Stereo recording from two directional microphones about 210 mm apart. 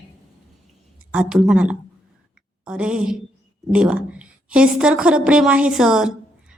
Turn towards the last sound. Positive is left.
turn(degrees=-5)  # may be behind; listen again after turning